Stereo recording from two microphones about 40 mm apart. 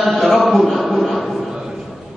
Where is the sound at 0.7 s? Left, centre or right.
Centre.